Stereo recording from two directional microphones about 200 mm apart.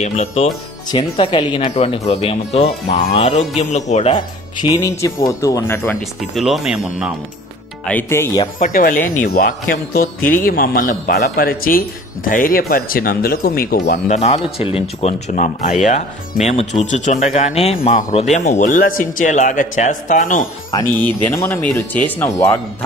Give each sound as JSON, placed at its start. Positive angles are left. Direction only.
{"t": 0.0, "sound": "a man's voice", "side_deg": 35}
{"t": 6.3, "sound": "speech", "side_deg": 0}
{"t": 7.8, "sound": "speech", "side_deg": 10}
{"t": 8.5, "sound": "a man's voice", "side_deg": 40}
{"t": 21.0, "sound": "speech", "side_deg": 15}